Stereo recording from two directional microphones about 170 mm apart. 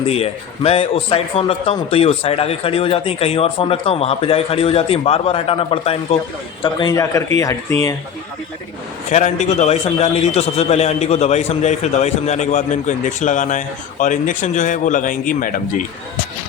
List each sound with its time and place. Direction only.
0.1 s a man's voice: 35° left (ahead or behind); by 7.9 s 20° left (ahead or behind)
9.0 s a man's voice: 45° left (ahead or behind)